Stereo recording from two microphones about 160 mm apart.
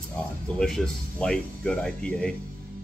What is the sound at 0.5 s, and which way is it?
Speech, 5° left (ahead or behind).